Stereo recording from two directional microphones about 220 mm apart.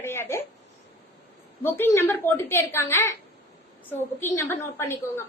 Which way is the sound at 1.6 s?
10° left (ahead or behind).